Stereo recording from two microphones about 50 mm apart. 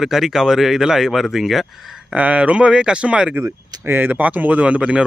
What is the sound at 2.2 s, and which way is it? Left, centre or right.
Speech, right.